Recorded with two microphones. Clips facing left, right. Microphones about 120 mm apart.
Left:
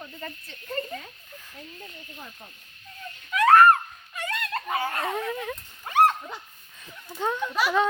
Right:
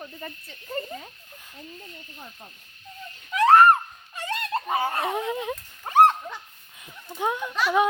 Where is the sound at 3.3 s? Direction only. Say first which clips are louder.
Right 1 dB; 25° right (ahead or behind).